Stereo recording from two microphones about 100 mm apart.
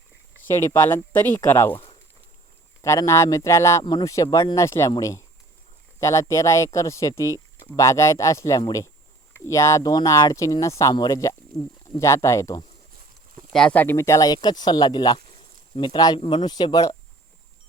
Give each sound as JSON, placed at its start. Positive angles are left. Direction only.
{"t": 0.5, "sound": "speech", "side_deg": 25}
{"t": 1.7, "sound": "a sound", "side_deg": 60}
{"t": 2.8, "sound": "speech", "side_deg": 30}
{"t": 13.5, "sound": "speech", "side_deg": 5}
{"t": 13.7, "sound": "speech", "side_deg": 25}